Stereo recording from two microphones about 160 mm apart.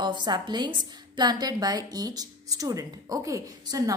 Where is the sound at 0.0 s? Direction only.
25° right (ahead or behind).